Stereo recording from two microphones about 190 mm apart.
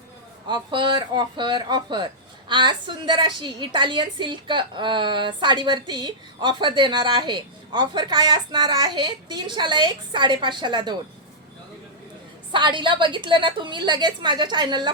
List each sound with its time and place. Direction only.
0.4 s a woman's voice: 25° right (ahead or behind)
12.5 s a woman's voice: 25° right (ahead or behind)